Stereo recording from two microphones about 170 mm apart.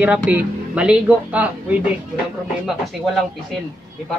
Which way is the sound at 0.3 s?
10° right (ahead or behind).